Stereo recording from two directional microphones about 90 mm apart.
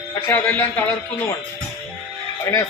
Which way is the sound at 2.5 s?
30° left (ahead or behind).